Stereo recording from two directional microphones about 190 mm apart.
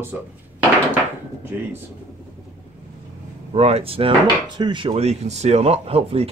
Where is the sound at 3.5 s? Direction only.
35° right (ahead or behind).